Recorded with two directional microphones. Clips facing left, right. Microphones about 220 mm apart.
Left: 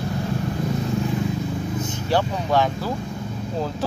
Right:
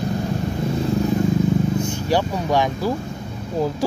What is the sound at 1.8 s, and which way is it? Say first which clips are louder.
Speech: right 2 dB; 10° right (ahead or behind).